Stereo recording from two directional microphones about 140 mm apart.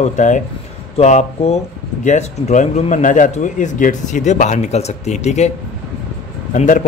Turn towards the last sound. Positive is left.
turn(degrees=60)  # may be behind; listen again after turning